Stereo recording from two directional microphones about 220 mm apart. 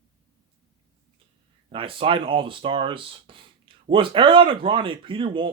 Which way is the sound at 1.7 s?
25° right (ahead or behind).